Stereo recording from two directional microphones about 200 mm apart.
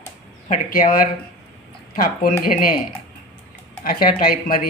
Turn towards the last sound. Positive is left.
turn(degrees=45)  # may be behind; listen again after turning